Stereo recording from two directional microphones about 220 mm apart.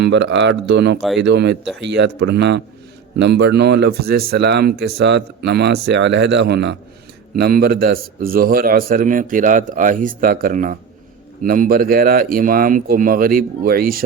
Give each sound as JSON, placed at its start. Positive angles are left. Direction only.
{"t": 0.0, "sound": "a man's voice", "side_deg": -50}